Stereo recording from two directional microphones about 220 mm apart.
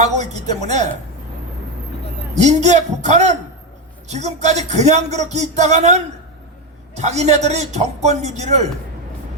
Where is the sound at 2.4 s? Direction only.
30° right (ahead or behind).